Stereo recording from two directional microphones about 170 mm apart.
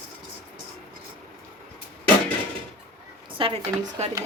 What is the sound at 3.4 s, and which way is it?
Speech, 30° right (ahead or behind).